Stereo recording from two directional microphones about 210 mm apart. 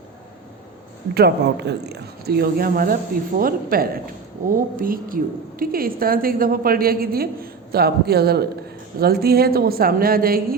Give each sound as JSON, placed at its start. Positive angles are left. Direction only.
{"t": 1.1, "sound": "speech", "side_deg": -50}